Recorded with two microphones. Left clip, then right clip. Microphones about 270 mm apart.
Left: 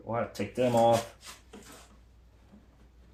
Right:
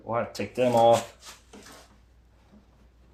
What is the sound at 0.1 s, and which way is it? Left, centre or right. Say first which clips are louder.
Speech: right 3 dB; centre.